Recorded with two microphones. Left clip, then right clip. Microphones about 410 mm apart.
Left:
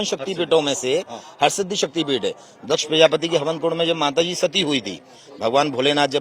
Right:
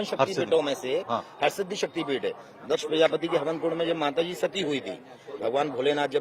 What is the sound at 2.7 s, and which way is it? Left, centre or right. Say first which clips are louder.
A man's voice: left 7 dB; left.